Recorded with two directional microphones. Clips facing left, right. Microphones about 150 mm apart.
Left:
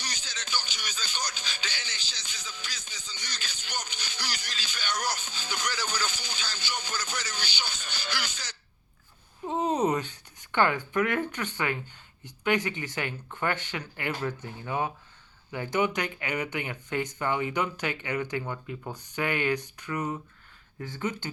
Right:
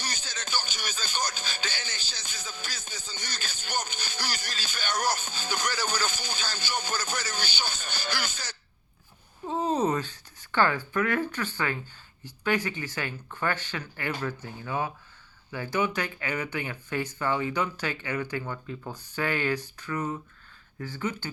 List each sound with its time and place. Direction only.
0.0 s music: 50° right (ahead or behind)
9.5 s speech: 20° left (ahead or behind)